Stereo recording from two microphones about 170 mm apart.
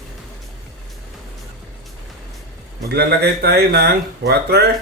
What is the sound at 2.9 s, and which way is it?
Speech, 70° right (ahead or behind).